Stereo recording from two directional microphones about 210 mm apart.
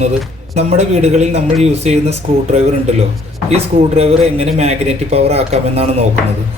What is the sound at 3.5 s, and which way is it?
Speech, 30° right (ahead or behind).